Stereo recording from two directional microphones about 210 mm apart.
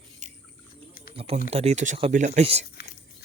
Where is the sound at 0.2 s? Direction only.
35° right (ahead or behind).